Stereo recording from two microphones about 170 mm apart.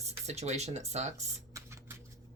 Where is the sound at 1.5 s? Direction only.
15° right (ahead or behind).